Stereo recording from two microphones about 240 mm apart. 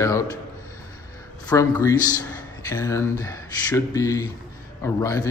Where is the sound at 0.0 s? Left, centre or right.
Centre.